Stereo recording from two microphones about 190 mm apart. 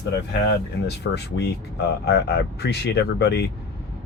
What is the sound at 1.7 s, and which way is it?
Speech, 60° left (ahead or behind).